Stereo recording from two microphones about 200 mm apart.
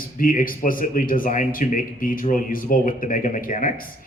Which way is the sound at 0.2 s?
45° left (ahead or behind).